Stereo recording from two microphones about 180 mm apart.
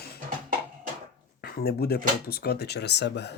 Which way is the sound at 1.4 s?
60° left (ahead or behind).